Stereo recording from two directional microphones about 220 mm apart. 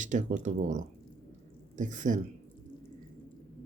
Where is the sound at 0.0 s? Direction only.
35° right (ahead or behind).